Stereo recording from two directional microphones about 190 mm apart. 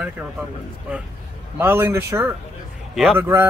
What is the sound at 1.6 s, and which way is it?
Speech, 10° right (ahead or behind).